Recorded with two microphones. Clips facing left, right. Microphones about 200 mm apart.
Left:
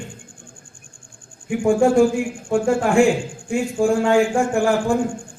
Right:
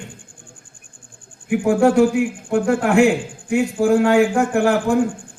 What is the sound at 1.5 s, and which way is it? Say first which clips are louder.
A man's voice: right 1 dB; 65° right (ahead or behind).